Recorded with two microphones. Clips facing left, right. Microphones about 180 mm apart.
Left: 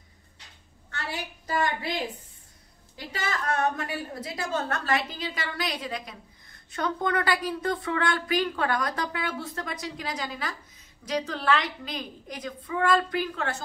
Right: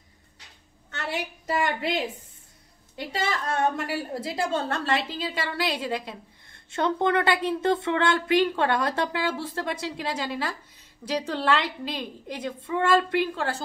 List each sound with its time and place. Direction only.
1.0 s a woman's voice: 25° right (ahead or behind)